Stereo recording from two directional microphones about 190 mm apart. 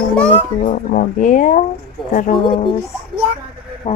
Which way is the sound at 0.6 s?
45° left (ahead or behind).